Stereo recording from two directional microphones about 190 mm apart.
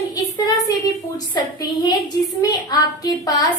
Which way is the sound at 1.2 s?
20° left (ahead or behind).